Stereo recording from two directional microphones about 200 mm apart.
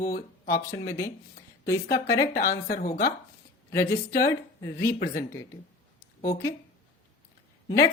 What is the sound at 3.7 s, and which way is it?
Speech, 15° left (ahead or behind).